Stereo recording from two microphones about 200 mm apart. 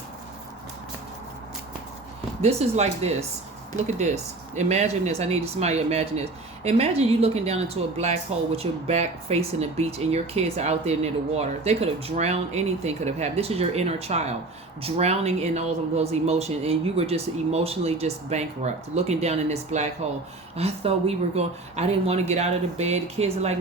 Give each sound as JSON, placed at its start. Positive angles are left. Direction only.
{"t": 2.4, "sound": "a woman's voice", "side_deg": -30}